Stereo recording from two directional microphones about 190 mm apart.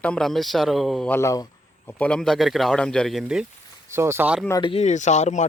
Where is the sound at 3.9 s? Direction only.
15° right (ahead or behind).